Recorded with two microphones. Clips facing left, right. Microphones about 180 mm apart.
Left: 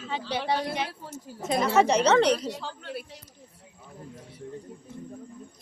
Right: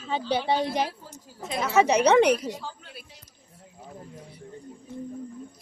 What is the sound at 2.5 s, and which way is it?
Speech, 70° left (ahead or behind).